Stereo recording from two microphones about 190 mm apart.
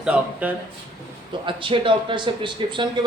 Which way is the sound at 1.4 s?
25° right (ahead or behind).